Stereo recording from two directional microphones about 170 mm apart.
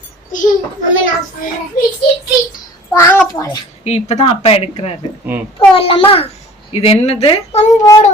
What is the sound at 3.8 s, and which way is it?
A child's voice, 40° left (ahead or behind).